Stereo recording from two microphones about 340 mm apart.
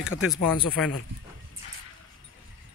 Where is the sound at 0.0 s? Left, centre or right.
Centre.